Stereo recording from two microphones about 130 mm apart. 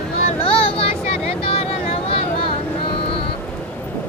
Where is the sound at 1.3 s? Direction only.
45° left (ahead or behind).